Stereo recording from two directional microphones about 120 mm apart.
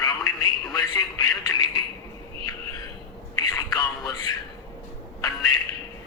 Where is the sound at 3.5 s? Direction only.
30° left (ahead or behind).